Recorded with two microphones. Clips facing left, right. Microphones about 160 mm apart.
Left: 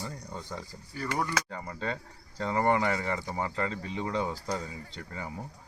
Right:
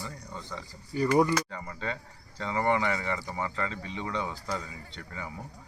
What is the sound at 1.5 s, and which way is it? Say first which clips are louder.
Speech: left 1 dB; 40° left (ahead or behind).